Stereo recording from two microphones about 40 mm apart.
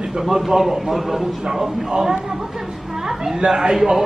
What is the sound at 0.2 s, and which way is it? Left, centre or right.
A man's voice, centre.